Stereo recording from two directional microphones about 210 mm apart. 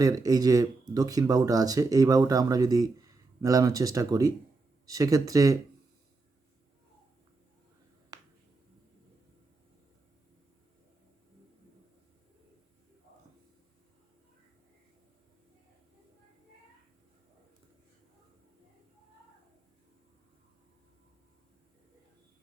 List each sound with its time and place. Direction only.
0.0 s speech: 15° right (ahead or behind)